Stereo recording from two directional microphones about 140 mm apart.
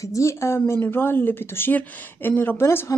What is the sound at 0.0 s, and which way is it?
A woman's voice, 20° left (ahead or behind).